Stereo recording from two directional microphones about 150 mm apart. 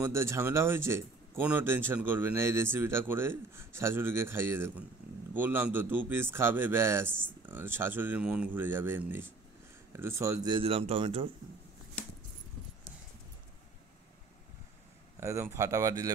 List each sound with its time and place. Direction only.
0.0 s speech: 20° right (ahead or behind)
10.5 s speech: 40° right (ahead or behind)
15.1 s speech: 20° right (ahead or behind)